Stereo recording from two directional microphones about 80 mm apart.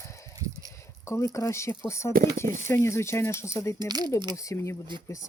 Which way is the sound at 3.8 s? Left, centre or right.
Right.